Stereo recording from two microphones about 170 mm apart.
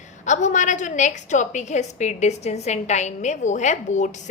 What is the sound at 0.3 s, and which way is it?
A woman's voice, 45° left (ahead or behind).